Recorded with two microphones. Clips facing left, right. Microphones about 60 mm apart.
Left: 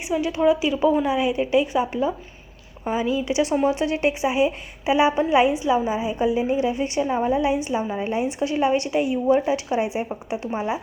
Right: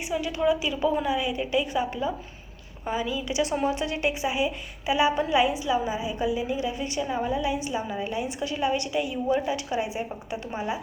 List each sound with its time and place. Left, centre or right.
0.1 s a woman's voice: centre